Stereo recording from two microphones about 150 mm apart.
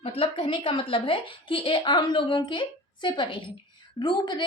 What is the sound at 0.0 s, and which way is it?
A woman's voice, 40° left (ahead or behind).